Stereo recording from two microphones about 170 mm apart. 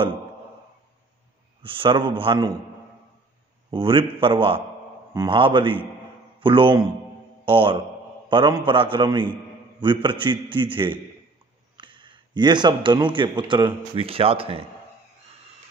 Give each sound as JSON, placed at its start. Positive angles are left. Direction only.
{"t": 1.6, "sound": "a man's voice", "side_deg": -30}
{"t": 3.7, "sound": "a man's voice", "side_deg": -30}